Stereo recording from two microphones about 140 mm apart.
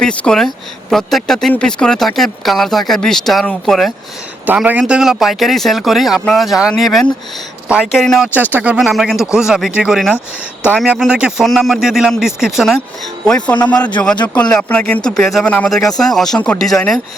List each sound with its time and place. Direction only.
0.0 s speech: 5° left (ahead or behind)
4.4 s speech: 10° right (ahead or behind)